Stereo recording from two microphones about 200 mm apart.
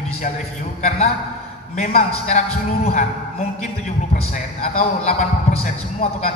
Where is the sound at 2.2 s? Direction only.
35° left (ahead or behind).